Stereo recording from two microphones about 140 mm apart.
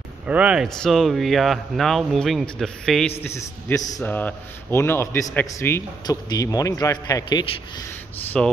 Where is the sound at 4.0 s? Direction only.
10° left (ahead or behind); by 7.4 s 30° left (ahead or behind).